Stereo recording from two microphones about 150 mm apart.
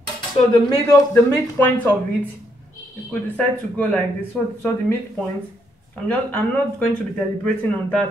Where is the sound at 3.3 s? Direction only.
10° left (ahead or behind).